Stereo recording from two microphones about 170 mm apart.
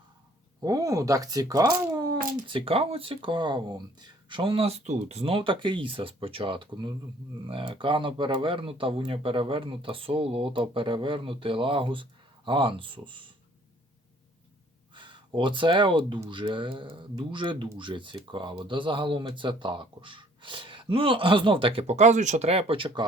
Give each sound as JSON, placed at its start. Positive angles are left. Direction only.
{"t": 0.6, "sound": "speech", "side_deg": -20}
{"t": 14.9, "sound": "speech", "side_deg": -25}